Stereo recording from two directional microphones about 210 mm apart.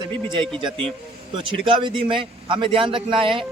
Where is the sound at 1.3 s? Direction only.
25° right (ahead or behind).